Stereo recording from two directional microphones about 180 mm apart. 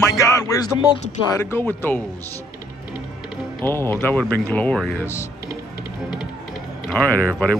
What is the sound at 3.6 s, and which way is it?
Speech, 10° left (ahead or behind).